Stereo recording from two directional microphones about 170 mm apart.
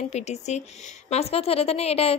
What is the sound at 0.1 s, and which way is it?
A woman's voice, 40° left (ahead or behind).